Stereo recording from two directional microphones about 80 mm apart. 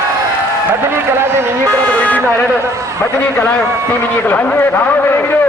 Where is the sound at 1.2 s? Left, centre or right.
Right.